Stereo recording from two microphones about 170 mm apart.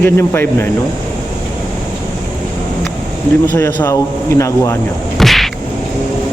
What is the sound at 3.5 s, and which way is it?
A man's voice, 15° left (ahead or behind).